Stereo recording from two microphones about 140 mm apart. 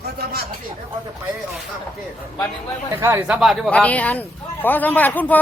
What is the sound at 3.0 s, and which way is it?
Speech, 15° right (ahead or behind).